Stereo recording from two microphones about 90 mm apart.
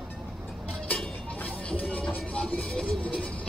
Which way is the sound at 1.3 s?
15° left (ahead or behind).